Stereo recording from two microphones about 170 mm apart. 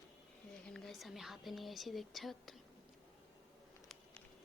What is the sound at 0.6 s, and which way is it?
Speech, 5° left (ahead or behind).